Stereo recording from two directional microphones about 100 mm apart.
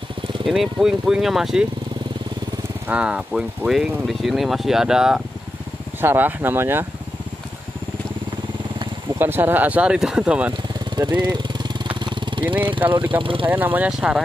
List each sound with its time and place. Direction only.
0.5 s speech: 5° right (ahead or behind)
2.9 s speech: 10° right (ahead or behind)
5.9 s speech: 20° right (ahead or behind)
9.2 s speech: 20° right (ahead or behind)
11.0 s speech: 45° right (ahead or behind)
12.0 s vehicle: 55° right (ahead or behind)
13.1 s speech: 60° right (ahead or behind)
13.5 s speech: 20° right (ahead or behind)